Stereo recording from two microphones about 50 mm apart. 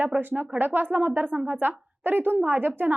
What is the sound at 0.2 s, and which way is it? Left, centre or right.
A woman's voice, right.